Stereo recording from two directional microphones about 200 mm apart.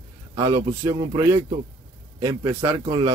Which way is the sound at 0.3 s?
20° right (ahead or behind).